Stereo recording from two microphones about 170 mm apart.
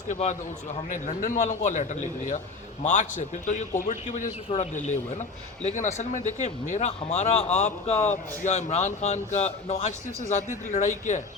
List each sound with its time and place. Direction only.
0.1 s a man's voice: 45° left (ahead or behind)